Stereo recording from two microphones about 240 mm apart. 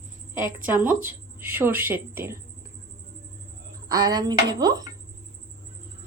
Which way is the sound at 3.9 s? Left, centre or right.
Centre.